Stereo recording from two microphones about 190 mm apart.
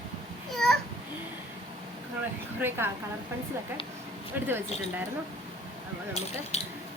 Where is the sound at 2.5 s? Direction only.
10° right (ahead or behind).